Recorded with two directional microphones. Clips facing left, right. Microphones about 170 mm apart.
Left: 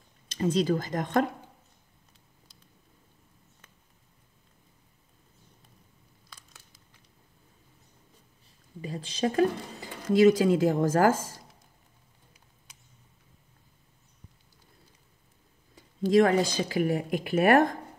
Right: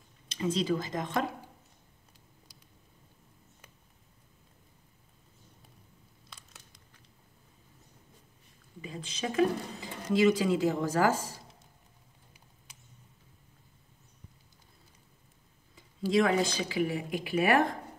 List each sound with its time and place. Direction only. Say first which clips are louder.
0.3 s a woman's voice: left 4 dB; 45° left (ahead or behind)
8.8 s a woman's voice: left 7 dB; 35° left (ahead or behind)
15.7 s a sound: left 5 dB; 45° left (ahead or behind)
16.6 s a woman's voice: left 4 dB; 50° left (ahead or behind)